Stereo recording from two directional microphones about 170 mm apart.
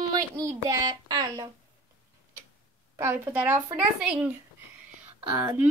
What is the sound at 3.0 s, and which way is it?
A woman's voice, 10° right (ahead or behind).